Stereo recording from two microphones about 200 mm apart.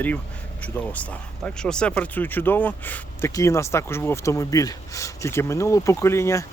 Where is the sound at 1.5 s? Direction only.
5° left (ahead or behind).